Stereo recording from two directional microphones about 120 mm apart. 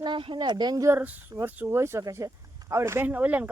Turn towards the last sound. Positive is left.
turn(degrees=-15)  # may be behind; listen again after turning